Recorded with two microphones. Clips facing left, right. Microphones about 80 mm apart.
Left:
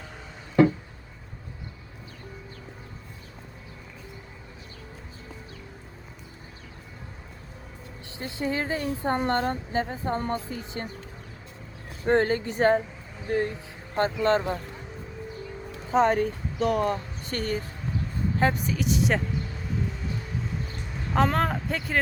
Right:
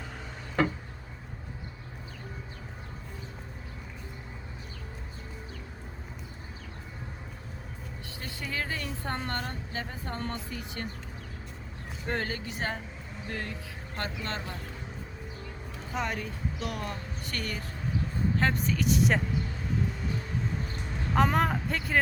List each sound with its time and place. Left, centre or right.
8.2 s a woman's voice: left
9.3 s speech: left
9.9 s a woman's voice: left
12.0 s speech: left
13.2 s speech: left
15.9 s speech: left
17.2 s speech: left
18.3 s a woman's voice: centre
21.2 s a woman's voice: centre